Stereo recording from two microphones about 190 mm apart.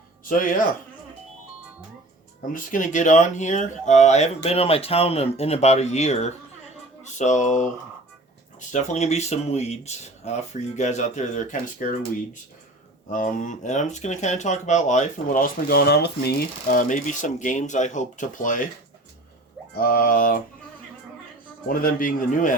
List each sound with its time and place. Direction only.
0.3 s a man's voice: 45° left (ahead or behind)
2.5 s speech: 45° left (ahead or behind)
8.7 s speech: 35° left (ahead or behind)
13.1 s speech: 45° left (ahead or behind)
19.7 s a man's voice: 50° left (ahead or behind)
21.7 s a man's voice: 50° left (ahead or behind)